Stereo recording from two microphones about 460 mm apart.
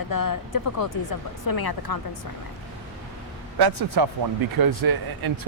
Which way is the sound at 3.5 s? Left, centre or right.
Right.